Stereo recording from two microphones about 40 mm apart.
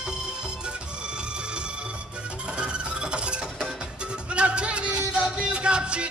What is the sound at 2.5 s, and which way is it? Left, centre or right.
Rub, right.